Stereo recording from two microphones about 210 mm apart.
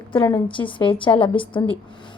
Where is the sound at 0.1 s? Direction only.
25° left (ahead or behind).